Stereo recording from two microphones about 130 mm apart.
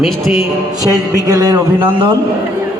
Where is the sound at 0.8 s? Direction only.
25° right (ahead or behind).